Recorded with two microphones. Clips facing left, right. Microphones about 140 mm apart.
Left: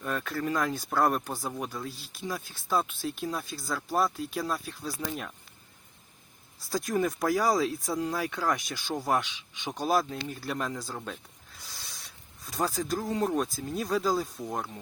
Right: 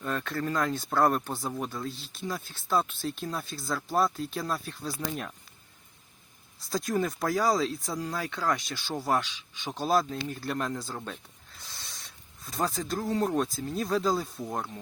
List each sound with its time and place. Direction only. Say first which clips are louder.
0.0 s speech: even; 5° left (ahead or behind)
6.7 s speech: left 1 dB; 10° left (ahead or behind)